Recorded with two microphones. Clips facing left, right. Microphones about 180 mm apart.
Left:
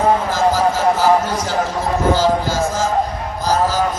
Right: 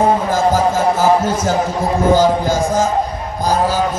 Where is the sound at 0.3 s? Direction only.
50° right (ahead or behind).